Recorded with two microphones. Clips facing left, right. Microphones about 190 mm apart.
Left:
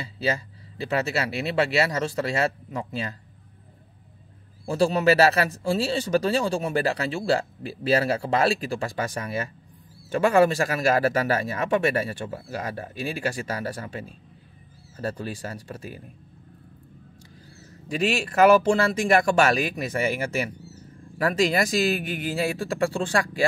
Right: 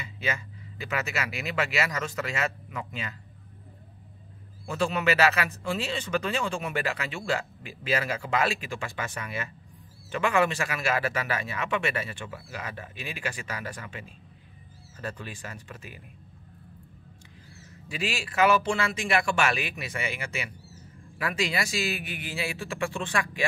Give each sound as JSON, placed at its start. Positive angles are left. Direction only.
{"t": 0.0, "sound": "speech", "side_deg": 35}
{"t": 4.6, "sound": "speech", "side_deg": 35}
{"t": 17.8, "sound": "speech", "side_deg": 40}